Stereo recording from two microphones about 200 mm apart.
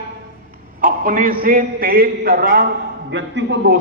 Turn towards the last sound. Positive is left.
turn(degrees=-60)  # may be behind; listen again after turning